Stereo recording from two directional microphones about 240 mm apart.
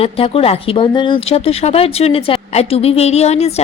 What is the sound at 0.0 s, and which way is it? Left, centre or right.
Speech, left.